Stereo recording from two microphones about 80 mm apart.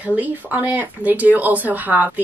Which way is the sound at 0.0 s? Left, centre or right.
Right.